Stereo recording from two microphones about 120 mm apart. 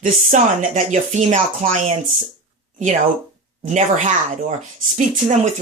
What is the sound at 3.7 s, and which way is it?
Speech, 85° right.